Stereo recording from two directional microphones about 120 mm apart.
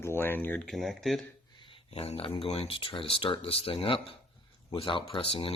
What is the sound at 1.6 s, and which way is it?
Speech, 50° left (ahead or behind).